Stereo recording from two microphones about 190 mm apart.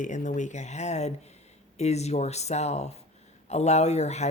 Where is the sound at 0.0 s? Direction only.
40° left (ahead or behind).